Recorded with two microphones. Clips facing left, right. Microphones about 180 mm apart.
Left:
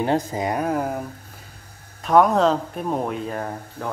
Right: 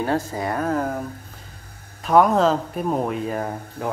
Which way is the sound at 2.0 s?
Centre (ahead or behind).